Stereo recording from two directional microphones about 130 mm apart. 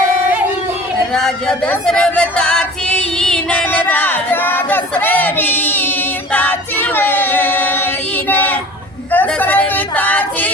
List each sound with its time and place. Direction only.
1.1 s female singing: 5° left (ahead or behind)
6.3 s choir: 15° left (ahead or behind)
8.3 s a sound: 15° left (ahead or behind)